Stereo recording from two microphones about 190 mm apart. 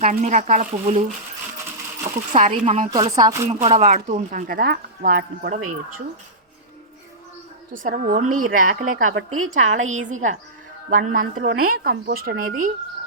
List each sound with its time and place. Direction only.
0.0 s speech: 45° right (ahead or behind)
2.3 s speech: 35° right (ahead or behind)
2.9 s speech: 20° right (ahead or behind)
3.5 s speech: 35° right (ahead or behind); by 5.5 s 50° right (ahead or behind)
7.7 s speech: 45° right (ahead or behind)
9.1 s a woman's voice: 90° right
9.5 s speech: 40° right (ahead or behind)
11.7 s speech: 55° right (ahead or behind)